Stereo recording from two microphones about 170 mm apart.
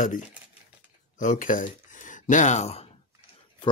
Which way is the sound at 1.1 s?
50° left (ahead or behind).